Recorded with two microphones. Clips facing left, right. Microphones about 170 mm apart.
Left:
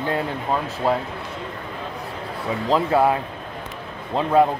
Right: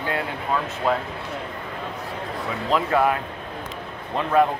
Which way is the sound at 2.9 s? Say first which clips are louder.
Left 2 dB; 25° left (ahead or behind).